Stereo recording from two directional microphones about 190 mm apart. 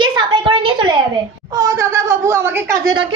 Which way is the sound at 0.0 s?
25° right (ahead or behind).